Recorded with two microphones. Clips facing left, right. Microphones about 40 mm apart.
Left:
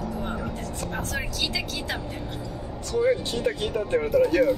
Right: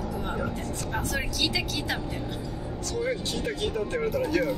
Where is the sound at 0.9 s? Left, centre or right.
Centre.